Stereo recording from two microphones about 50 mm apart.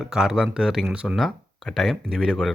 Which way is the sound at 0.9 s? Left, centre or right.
Right.